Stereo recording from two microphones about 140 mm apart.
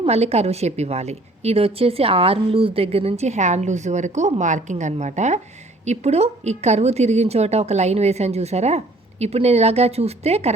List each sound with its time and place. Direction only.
0.0 s a woman's voice: 50° right (ahead or behind)